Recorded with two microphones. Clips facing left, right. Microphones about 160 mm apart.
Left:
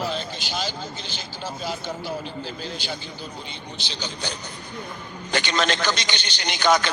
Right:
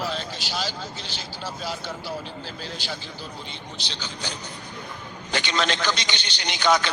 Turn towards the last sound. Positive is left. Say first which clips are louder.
# left 1 dB
turn(degrees=45)  # may be behind; listen again after turning